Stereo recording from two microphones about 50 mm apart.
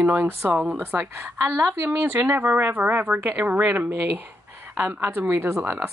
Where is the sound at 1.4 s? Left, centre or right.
Right.